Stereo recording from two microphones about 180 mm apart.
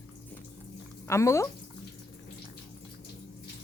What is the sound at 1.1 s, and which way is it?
Speech, 15° left (ahead or behind).